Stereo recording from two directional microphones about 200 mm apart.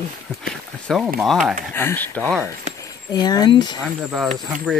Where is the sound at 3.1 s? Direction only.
20° left (ahead or behind).